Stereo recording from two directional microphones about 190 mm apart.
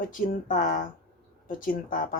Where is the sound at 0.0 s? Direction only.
45° left (ahead or behind).